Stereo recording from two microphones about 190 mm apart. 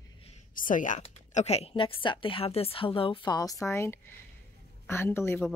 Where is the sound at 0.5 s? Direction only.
45° left (ahead or behind).